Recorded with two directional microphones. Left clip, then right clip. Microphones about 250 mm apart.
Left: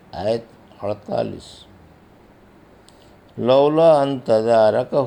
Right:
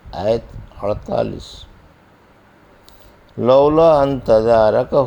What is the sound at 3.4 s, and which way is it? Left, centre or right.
Speech, right.